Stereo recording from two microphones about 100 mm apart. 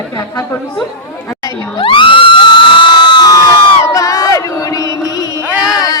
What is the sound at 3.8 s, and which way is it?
Crowd, 30° left (ahead or behind).